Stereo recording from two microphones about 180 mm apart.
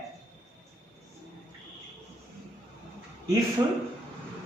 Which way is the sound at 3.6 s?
20° right (ahead or behind).